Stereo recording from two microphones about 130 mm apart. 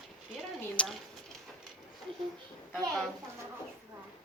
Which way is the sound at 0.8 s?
10° left (ahead or behind).